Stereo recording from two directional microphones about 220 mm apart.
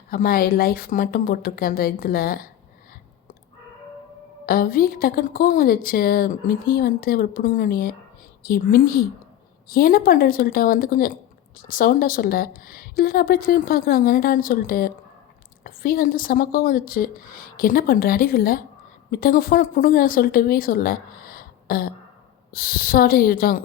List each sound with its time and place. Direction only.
0.1 s a woman's voice: 40° left (ahead or behind)
4.4 s a woman's voice: 40° left (ahead or behind)